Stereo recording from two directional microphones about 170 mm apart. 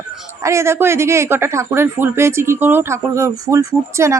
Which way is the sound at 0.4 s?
15° right (ahead or behind).